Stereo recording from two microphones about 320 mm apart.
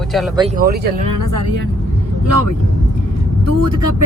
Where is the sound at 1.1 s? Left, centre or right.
Left.